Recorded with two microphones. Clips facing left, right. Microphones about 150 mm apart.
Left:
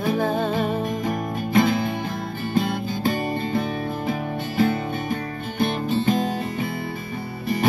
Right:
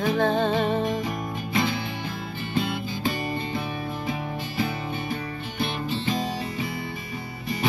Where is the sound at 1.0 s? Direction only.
50° left (ahead or behind).